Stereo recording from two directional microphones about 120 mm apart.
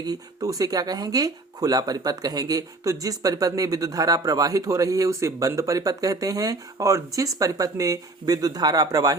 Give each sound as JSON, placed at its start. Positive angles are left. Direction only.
{"t": 0.0, "sound": "speech", "side_deg": -35}